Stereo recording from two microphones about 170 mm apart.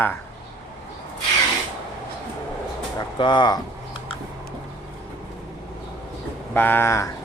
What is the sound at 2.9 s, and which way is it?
Speech, 25° left (ahead or behind).